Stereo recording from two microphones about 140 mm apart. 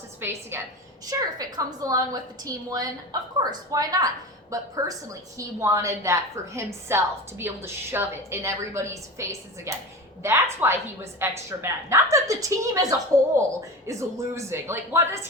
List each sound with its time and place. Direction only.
0.2 s a woman's voice: 15° right (ahead or behind)
1.0 s a woman's voice: 25° right (ahead or behind)